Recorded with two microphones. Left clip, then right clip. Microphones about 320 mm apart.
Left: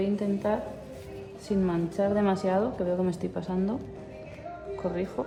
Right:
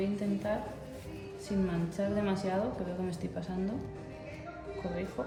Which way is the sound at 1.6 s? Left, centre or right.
Centre.